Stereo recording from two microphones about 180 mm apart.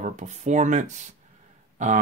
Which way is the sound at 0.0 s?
40° right (ahead or behind).